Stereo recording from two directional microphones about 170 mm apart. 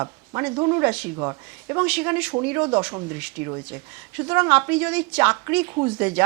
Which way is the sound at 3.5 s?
25° right (ahead or behind).